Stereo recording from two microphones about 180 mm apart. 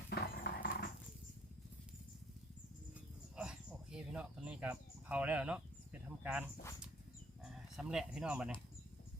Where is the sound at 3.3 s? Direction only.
5° right (ahead or behind).